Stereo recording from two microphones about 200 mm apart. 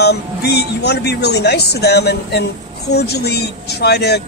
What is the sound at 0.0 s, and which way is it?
Speech, 55° left (ahead or behind).